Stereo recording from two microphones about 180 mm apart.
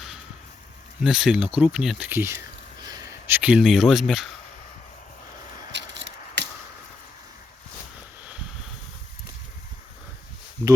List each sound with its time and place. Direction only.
1.0 s speech: 5° right (ahead or behind)
5.7 s scissors: 80° right